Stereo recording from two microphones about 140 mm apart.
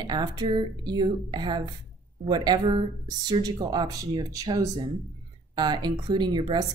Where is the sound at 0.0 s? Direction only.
30° right (ahead or behind).